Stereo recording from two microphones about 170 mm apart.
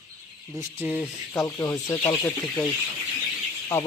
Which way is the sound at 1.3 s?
20° left (ahead or behind).